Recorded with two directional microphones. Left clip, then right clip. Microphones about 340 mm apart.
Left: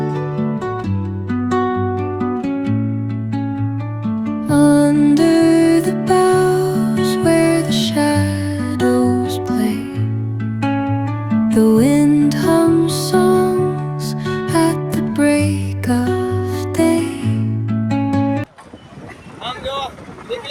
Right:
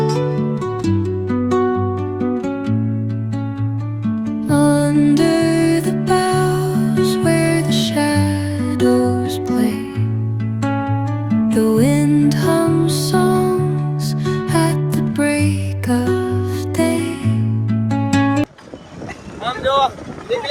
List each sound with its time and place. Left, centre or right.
1.5 s music: centre
4.0 s music: centre
10.6 s music: right
11.4 s music: centre
19.5 s boat: centre